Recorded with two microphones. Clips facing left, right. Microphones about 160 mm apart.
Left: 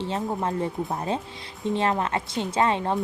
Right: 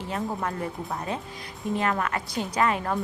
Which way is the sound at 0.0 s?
25° left (ahead or behind).